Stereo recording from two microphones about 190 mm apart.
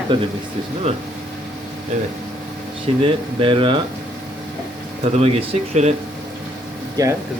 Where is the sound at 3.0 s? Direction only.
30° right (ahead or behind).